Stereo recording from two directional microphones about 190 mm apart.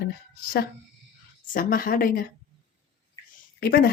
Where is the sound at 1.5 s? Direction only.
50° left (ahead or behind).